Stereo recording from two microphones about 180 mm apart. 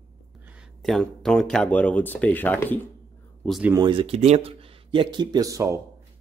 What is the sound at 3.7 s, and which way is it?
Dishes, 25° right (ahead or behind).